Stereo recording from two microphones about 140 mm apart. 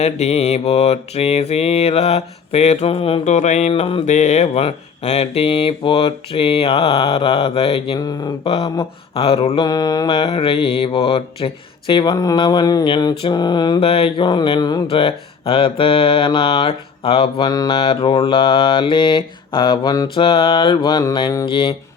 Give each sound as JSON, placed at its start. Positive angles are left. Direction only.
{"t": 0.0, "sound": "speech", "side_deg": 50}
{"t": 3.2, "sound": "speech", "side_deg": 55}
{"t": 4.1, "sound": "speech", "side_deg": 55}
{"t": 7.9, "sound": "a sound", "side_deg": 25}
{"t": 8.4, "sound": "speech", "side_deg": 45}
{"t": 9.6, "sound": "mantra", "side_deg": 30}
{"t": 17.4, "sound": "a sound", "side_deg": 25}
{"t": 17.7, "sound": "mantra", "side_deg": 40}
{"t": 20.2, "sound": "mantra", "side_deg": 40}